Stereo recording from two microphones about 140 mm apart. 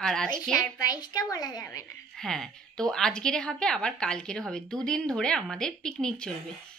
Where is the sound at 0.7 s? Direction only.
30° left (ahead or behind).